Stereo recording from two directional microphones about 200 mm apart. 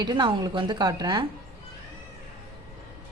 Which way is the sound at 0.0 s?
20° right (ahead or behind).